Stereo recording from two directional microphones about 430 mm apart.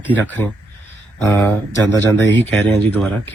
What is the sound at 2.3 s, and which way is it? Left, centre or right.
Speech, left.